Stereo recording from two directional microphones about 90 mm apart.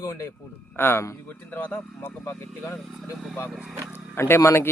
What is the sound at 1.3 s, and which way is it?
Speech, 15° left (ahead or behind).